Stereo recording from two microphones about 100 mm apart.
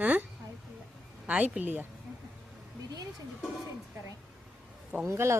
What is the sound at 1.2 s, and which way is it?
Speech, 15° right (ahead or behind).